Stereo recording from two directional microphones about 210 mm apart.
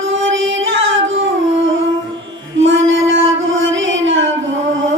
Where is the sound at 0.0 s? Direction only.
65° right (ahead or behind).